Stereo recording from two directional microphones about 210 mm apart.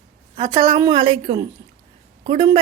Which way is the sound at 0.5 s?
20° right (ahead or behind).